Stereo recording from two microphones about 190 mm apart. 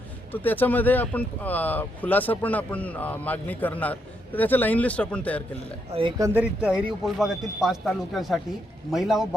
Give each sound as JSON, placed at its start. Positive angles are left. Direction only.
{"t": 0.4, "sound": "speech", "side_deg": 10}
{"t": 5.9, "sound": "speech", "side_deg": -25}
{"t": 6.2, "sound": "speech", "side_deg": -10}